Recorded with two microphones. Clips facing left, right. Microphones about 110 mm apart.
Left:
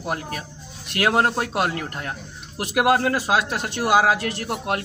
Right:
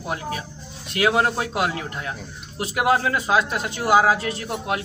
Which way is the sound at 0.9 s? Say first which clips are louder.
Even; 50° left (ahead or behind).